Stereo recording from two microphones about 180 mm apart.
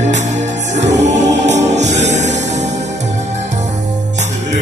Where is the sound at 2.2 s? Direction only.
80° right.